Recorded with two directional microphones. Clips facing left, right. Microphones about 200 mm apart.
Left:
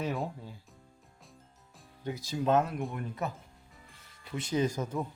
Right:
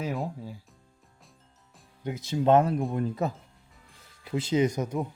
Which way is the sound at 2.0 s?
20° right (ahead or behind).